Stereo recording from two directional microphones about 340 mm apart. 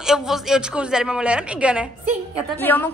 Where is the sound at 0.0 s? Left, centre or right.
Centre.